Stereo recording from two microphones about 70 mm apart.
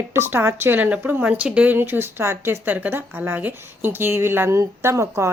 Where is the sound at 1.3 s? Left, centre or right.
Centre.